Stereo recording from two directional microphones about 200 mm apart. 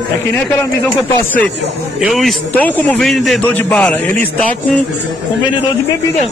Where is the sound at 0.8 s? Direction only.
10° left (ahead or behind).